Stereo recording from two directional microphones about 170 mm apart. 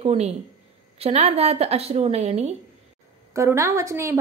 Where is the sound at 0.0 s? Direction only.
35° right (ahead or behind).